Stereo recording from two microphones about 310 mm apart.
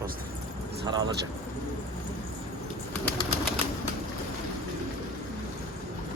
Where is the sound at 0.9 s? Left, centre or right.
Centre.